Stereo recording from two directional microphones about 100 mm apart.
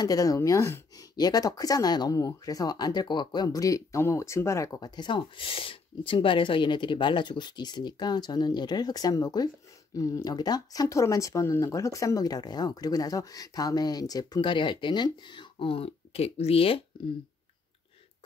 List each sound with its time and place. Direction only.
0.0 s speech: 35° left (ahead or behind)
1.1 s speech: 40° left (ahead or behind)
4.7 s speech: 45° left (ahead or behind)
14.4 s speech: 55° left (ahead or behind); by 16.8 s 70° left (ahead or behind)